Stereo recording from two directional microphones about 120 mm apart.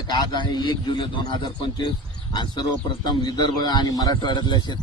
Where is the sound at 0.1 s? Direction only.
40° left (ahead or behind).